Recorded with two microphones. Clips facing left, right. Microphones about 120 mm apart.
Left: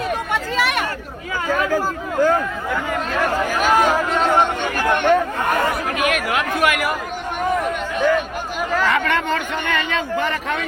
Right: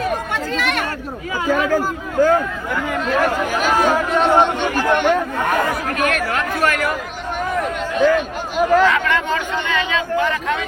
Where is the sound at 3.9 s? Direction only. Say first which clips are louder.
Right 2 dB; 10° right (ahead or behind).